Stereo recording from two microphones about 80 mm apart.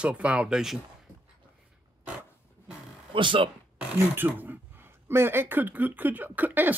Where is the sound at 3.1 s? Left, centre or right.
Right.